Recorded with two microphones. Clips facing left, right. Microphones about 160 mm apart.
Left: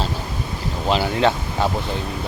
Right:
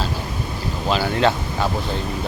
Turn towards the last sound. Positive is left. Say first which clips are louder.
# even
turn(degrees=25)  # may be behind; listen again after turning